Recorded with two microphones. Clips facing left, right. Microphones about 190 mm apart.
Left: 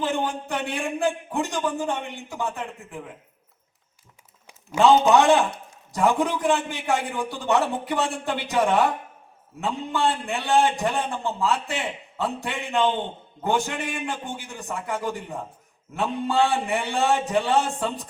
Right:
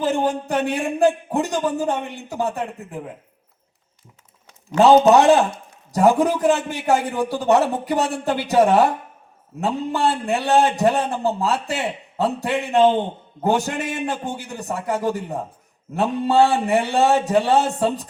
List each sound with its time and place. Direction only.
0.0 s a man's voice: 40° right (ahead or behind)
4.8 s a man's voice: 40° right (ahead or behind)